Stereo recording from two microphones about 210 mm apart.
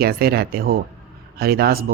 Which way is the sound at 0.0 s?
45° right (ahead or behind).